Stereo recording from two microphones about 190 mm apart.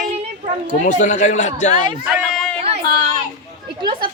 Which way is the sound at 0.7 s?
40° left (ahead or behind).